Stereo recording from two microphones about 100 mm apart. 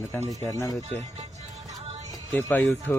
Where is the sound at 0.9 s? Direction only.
90° right.